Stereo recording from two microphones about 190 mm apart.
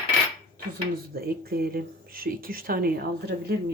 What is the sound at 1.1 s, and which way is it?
Speech, 55° right (ahead or behind).